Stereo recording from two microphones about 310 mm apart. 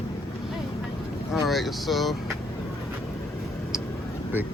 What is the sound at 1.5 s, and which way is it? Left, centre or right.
Speech, centre.